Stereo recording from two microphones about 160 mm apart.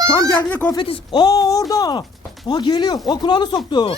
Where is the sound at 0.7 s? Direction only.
30° left (ahead or behind).